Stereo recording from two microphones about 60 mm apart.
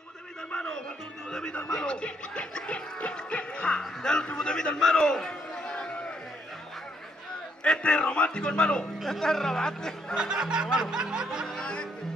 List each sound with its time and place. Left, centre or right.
0.5 s music: centre
7.6 s a man's voice: centre
10.1 s music: centre
11.6 s music: centre